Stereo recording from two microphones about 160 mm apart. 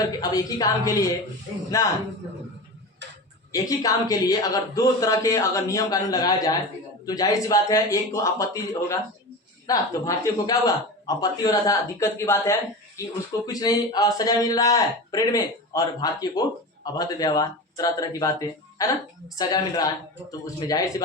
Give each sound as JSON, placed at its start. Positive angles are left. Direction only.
{"t": 0.0, "sound": "speech", "side_deg": 20}
{"t": 3.5, "sound": "speech", "side_deg": 20}